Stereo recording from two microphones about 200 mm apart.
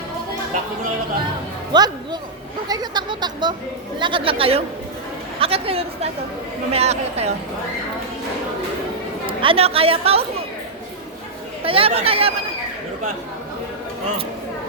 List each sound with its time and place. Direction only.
1.7 s speech: 20° right (ahead or behind)
9.2 s speech: 25° right (ahead or behind)
11.6 s speech: 30° right (ahead or behind)